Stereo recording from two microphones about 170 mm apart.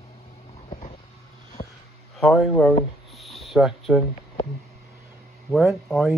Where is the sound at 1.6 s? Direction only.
40° left (ahead or behind).